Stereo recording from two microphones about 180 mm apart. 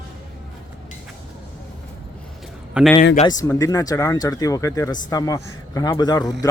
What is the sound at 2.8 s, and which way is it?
Speech, 5° right (ahead or behind).